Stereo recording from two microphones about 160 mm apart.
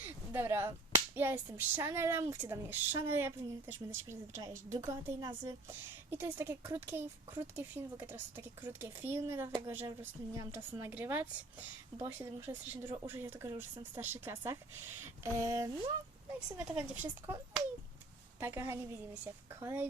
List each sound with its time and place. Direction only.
0.3 s speech: 15° right (ahead or behind)
16.6 s speech: 10° right (ahead or behind)